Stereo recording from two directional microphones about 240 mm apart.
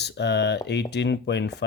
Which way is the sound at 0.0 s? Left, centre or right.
Left.